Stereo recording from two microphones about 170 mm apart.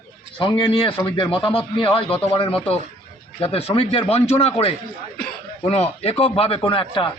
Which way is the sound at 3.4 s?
35° left (ahead or behind).